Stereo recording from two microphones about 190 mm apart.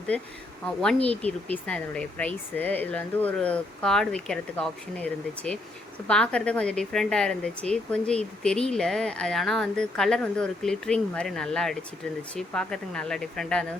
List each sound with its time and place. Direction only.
1.1 s speech: 30° right (ahead or behind)
1.6 s speech: 5° left (ahead or behind)